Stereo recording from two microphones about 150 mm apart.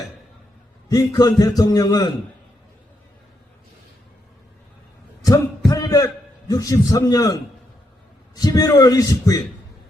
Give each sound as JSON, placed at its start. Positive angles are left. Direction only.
{"t": 0.9, "sound": "a man's voice", "side_deg": 25}
{"t": 5.2, "sound": "a sound", "side_deg": 25}
{"t": 6.5, "sound": "a man's voice", "side_deg": 25}
{"t": 8.4, "sound": "a man's voice", "side_deg": 25}